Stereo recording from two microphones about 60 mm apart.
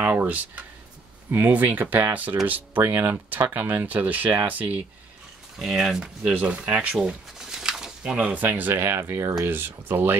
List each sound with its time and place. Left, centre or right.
0.0 s speech: right
2.8 s speech: right
5.6 s speech: centre
6.2 s speech: right
7.0 s a sound: centre
8.4 s speech: right